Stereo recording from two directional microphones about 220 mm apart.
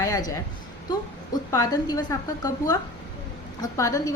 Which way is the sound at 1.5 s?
15° left (ahead or behind).